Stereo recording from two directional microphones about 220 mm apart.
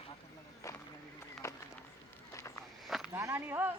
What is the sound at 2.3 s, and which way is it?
Walk, 15° left (ahead or behind).